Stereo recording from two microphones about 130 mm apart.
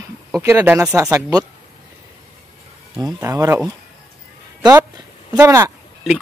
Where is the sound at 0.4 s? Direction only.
20° right (ahead or behind).